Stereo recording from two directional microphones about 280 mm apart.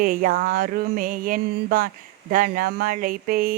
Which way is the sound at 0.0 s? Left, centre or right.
Right.